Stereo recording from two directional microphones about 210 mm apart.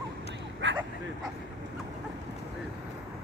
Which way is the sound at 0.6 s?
60° right (ahead or behind).